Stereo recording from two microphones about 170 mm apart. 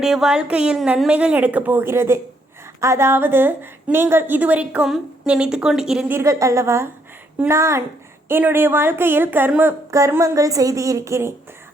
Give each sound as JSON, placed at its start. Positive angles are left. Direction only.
{"t": 0.0, "sound": "a woman's voice", "side_deg": -5}